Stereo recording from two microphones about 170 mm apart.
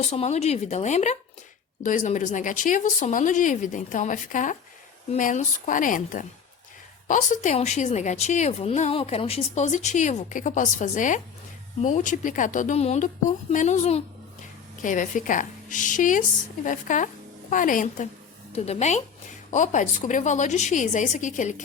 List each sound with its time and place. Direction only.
0.0 s a woman's voice: 40° left (ahead or behind)
18.5 s a woman's voice: 40° left (ahead or behind)